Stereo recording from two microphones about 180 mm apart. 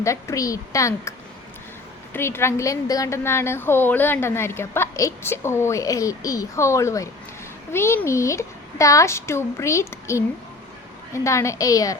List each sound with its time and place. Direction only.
0.0 s a woman's voice: 15° left (ahead or behind)
2.1 s a woman's voice: 15° left (ahead or behind)